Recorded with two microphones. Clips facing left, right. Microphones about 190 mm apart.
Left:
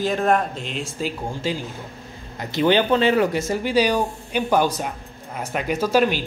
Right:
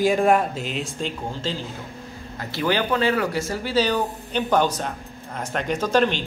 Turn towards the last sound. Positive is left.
turn(degrees=10)  # may be behind; listen again after turning